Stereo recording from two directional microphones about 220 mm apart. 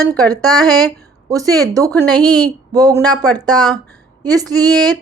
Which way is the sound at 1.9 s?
5° left (ahead or behind).